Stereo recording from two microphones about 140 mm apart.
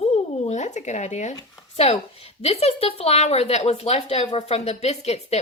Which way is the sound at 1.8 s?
45° left (ahead or behind).